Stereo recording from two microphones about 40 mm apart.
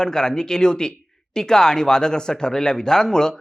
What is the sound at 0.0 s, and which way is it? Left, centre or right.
Speech, centre.